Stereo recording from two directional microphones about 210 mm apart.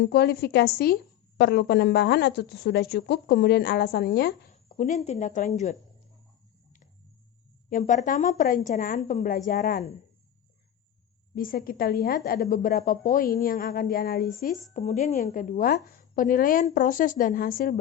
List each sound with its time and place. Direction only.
0.0 s a woman's voice: 50° left (ahead or behind)
4.5 s speech: 35° left (ahead or behind)
7.7 s a woman's voice: 35° left (ahead or behind)
11.3 s a woman's voice: 45° left (ahead or behind)
14.7 s a woman's voice: 35° left (ahead or behind)